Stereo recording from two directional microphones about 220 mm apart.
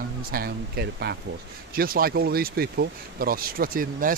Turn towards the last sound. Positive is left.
turn(degrees=-40)  # may be behind; listen again after turning